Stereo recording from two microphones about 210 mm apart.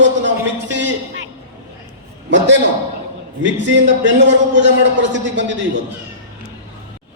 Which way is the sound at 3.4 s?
60° right (ahead or behind).